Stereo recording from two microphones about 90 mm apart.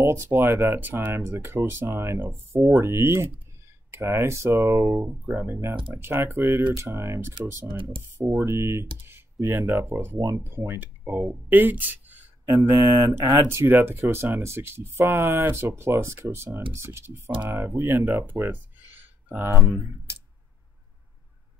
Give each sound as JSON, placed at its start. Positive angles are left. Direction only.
{"t": 0.0, "sound": "speech", "side_deg": -25}
{"t": 5.3, "sound": "speech", "side_deg": -20}
{"t": 7.3, "sound": "speech", "side_deg": -65}
{"t": 8.4, "sound": "speech", "side_deg": -30}
{"t": 9.8, "sound": "speech", "side_deg": -25}
{"t": 12.6, "sound": "speech", "side_deg": -30}
{"t": 13.2, "sound": "speech", "side_deg": -40}
{"t": 13.5, "sound": "speech", "side_deg": -25}